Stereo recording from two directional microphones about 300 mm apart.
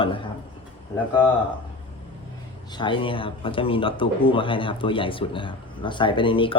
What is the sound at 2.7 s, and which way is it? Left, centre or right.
Speech, centre.